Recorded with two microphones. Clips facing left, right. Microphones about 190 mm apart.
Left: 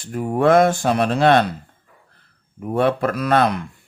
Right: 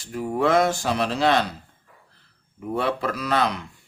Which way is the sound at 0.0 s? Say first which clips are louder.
Left 5 dB; 50° left (ahead or behind).